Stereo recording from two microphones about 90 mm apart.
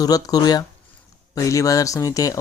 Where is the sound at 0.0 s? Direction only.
45° left (ahead or behind).